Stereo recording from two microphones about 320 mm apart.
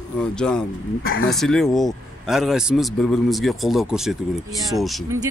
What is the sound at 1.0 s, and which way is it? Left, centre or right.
Speech, left.